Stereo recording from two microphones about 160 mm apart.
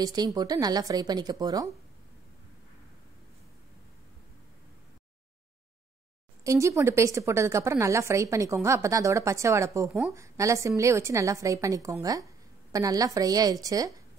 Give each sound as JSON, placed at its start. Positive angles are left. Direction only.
{"t": 0.0, "sound": "a woman's voice", "side_deg": -25}
{"t": 6.4, "sound": "a woman's voice", "side_deg": -20}